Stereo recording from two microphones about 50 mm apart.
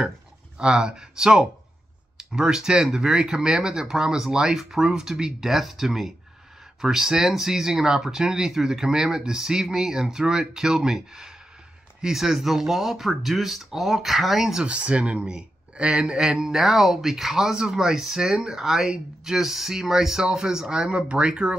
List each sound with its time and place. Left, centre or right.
0.6 s a man's voice: centre
14.6 s a man's voice: right